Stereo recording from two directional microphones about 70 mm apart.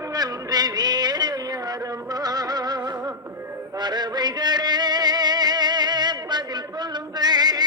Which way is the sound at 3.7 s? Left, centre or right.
Right.